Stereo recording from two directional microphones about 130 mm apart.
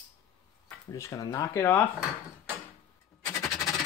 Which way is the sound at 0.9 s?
25° left (ahead or behind).